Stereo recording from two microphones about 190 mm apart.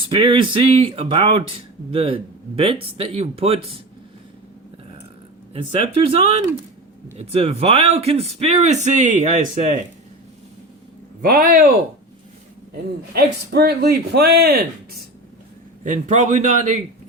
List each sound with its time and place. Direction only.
0.1 s speech: 25° right (ahead or behind)
5.5 s speech: 30° right (ahead or behind)
7.3 s a man's voice: 30° right (ahead or behind)
11.2 s speech: 50° right (ahead or behind)
13.1 s speech: 55° right (ahead or behind)
15.8 s a man's voice: 40° right (ahead or behind)